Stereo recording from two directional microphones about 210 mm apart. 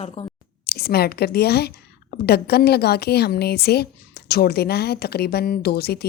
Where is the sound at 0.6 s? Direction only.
50° left (ahead or behind).